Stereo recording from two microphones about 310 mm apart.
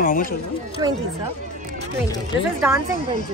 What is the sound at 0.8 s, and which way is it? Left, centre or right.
Speech, centre.